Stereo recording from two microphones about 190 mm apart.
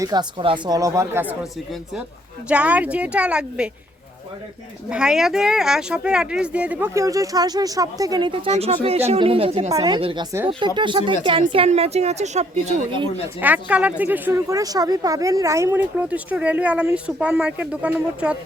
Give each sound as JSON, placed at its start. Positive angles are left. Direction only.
{"t": 0.0, "sound": "speech", "side_deg": -20}
{"t": 4.9, "sound": "speech", "side_deg": -5}
{"t": 13.2, "sound": "speech", "side_deg": -10}